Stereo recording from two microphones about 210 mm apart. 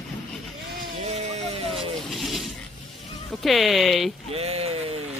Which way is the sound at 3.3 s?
Centre (ahead or behind).